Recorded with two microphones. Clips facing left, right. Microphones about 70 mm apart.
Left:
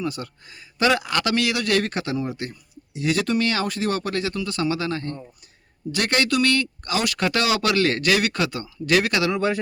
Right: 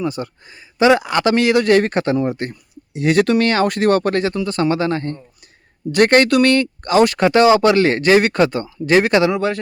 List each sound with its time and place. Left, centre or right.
0.0 s speech: right